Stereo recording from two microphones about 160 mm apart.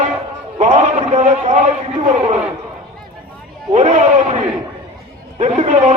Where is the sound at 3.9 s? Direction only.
45° right (ahead or behind).